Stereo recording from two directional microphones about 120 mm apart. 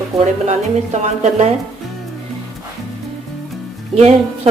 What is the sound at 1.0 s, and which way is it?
Speech, 65° right (ahead or behind).